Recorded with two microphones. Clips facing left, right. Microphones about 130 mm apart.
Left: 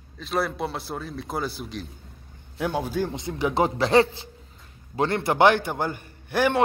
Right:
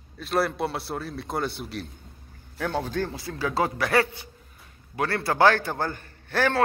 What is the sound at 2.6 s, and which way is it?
A man's voice, 10° left (ahead or behind).